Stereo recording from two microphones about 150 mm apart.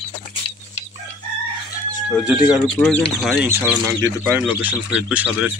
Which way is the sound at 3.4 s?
15° right (ahead or behind).